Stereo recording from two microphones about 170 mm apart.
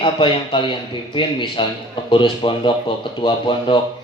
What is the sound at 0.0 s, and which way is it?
Speech, 30° left (ahead or behind).